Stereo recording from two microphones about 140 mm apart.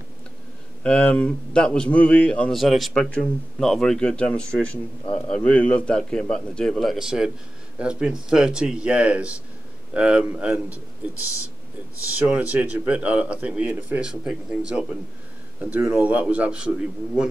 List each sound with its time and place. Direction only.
0.8 s a man's voice: 10° left (ahead or behind); by 10.8 s 10° right (ahead or behind)
12.1 s speech: 10° right (ahead or behind)